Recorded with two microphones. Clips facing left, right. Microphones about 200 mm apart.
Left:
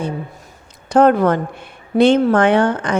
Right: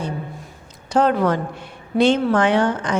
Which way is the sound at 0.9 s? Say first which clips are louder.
Left 5 dB; 50° left (ahead or behind).